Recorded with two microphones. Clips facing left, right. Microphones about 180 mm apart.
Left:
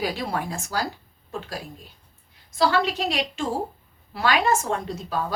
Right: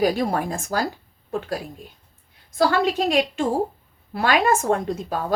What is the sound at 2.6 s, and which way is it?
A woman's voice, 50° right (ahead or behind).